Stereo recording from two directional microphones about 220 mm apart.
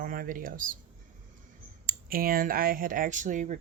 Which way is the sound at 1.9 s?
40° right (ahead or behind).